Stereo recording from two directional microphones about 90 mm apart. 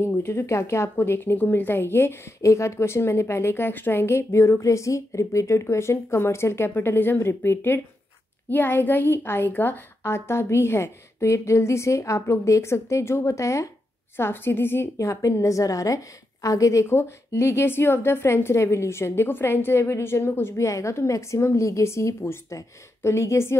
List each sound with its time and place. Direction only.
0.0 s speech: 25° left (ahead or behind)
15.0 s a woman's voice: 35° left (ahead or behind)